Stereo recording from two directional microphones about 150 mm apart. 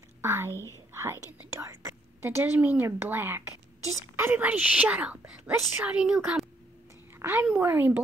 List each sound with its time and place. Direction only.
0.2 s a woman's voice: 15° right (ahead or behind)
0.5 s speech: 15° left (ahead or behind)
0.9 s speech: 15° right (ahead or behind)
7.2 s a sound: 15° right (ahead or behind)
7.5 s speech: 15° right (ahead or behind)